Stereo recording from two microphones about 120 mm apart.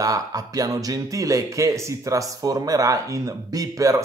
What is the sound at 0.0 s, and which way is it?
A man's voice, 30° right (ahead or behind).